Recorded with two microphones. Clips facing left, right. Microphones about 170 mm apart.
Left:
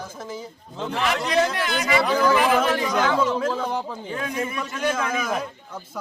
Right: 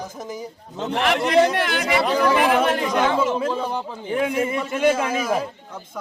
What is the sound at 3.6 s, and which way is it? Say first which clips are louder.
A man's voice: right 1 dB; 25° right (ahead or behind).